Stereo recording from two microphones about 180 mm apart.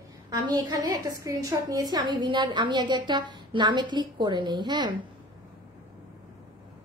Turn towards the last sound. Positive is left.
turn(degrees=-25)  # may be behind; listen again after turning